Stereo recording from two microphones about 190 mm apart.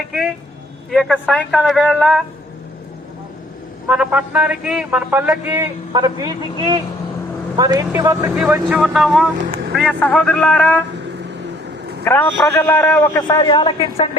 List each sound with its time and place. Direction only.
0.9 s a man's voice: centre (ahead or behind)
3.8 s a man's voice: 5° right (ahead or behind)
5.5 s a man's voice: 20° right (ahead or behind); by 10.8 s 5° left (ahead or behind)
12.0 s a man's voice: 10° left (ahead or behind); by 14.2 s 30° left (ahead or behind)